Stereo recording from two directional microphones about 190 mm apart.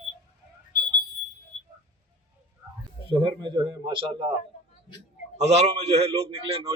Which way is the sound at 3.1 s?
25° right (ahead or behind).